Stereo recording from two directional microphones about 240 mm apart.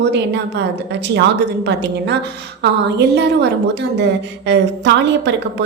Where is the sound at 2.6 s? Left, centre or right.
Right.